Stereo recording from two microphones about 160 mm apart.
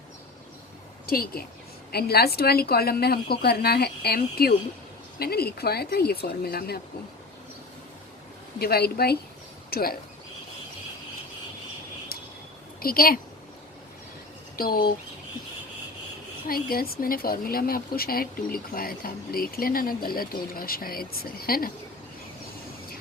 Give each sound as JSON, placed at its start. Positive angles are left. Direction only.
{"t": 1.0, "sound": "speech", "side_deg": 70}
{"t": 8.5, "sound": "speech", "side_deg": 75}
{"t": 12.1, "sound": "a sound", "side_deg": 70}
{"t": 12.8, "sound": "a woman's voice", "side_deg": 65}
{"t": 14.5, "sound": "speech", "side_deg": 65}
{"t": 16.5, "sound": "speech", "side_deg": 65}